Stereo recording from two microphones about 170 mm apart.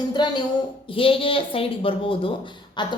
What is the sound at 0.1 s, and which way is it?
A woman's voice, 25° left (ahead or behind).